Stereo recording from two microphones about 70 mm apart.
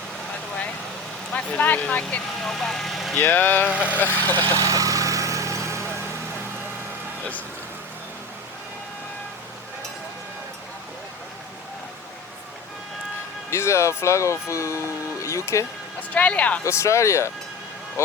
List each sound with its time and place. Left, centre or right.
1.3 s speech: left
2.4 s speech: centre
3.2 s speech: left
3.7 s speech: centre
3.9 s speech: left
4.5 s vehicle: right
13.5 s speech: left
16.0 s speech: centre
16.6 s speech: left